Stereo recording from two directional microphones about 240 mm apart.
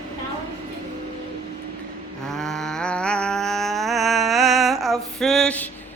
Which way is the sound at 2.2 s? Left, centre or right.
Centre.